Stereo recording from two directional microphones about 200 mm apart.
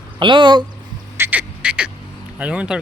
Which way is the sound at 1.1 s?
10° right (ahead or behind).